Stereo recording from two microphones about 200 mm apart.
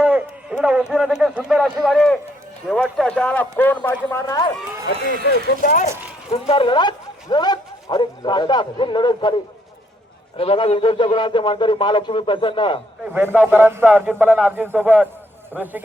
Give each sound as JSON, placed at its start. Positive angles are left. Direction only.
{"t": 0.0, "sound": "speech", "side_deg": -5}
{"t": 4.9, "sound": "speech", "side_deg": 55}
{"t": 6.3, "sound": "speech", "side_deg": 25}
{"t": 10.3, "sound": "speech", "side_deg": 30}
{"t": 13.1, "sound": "a man's voice", "side_deg": -10}